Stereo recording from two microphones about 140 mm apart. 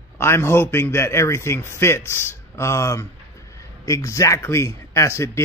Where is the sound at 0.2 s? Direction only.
15° left (ahead or behind).